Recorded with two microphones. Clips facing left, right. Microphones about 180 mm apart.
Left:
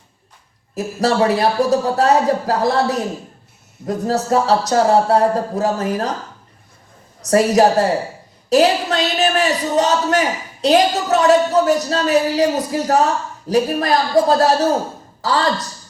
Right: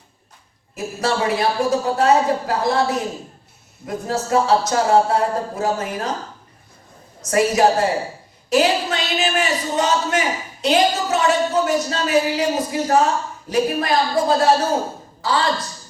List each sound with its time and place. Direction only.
0.8 s a man's voice: 40° left (ahead or behind)
7.2 s a woman's voice: 35° left (ahead or behind)